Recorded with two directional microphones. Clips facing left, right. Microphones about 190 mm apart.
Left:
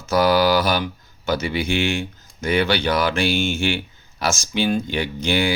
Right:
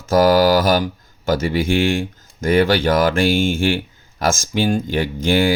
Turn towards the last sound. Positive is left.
turn(degrees=-50)  # may be behind; listen again after turning